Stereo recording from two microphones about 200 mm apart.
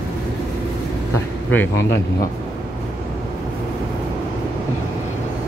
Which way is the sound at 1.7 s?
60° left (ahead or behind).